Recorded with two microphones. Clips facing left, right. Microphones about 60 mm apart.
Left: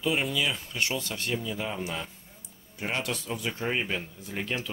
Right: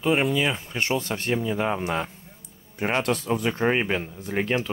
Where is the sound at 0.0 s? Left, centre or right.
Right.